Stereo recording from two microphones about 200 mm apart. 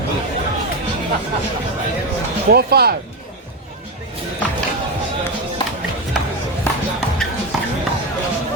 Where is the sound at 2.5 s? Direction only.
50° right (ahead or behind).